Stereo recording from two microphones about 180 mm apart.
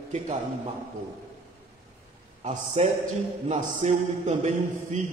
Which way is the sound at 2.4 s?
40° right (ahead or behind).